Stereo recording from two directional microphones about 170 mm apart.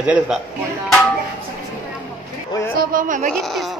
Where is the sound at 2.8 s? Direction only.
55° right (ahead or behind).